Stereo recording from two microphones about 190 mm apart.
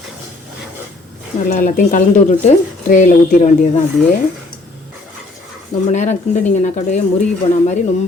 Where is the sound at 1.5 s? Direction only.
40° left (ahead or behind).